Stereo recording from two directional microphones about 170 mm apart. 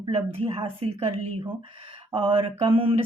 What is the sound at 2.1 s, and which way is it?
Speech, 30° right (ahead or behind).